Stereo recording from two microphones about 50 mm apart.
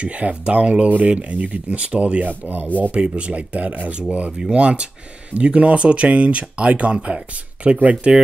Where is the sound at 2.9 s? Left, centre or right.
Right.